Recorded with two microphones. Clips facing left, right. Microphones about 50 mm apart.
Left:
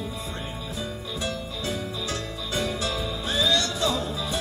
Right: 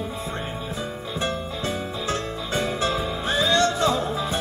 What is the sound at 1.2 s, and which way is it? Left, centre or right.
Music, right.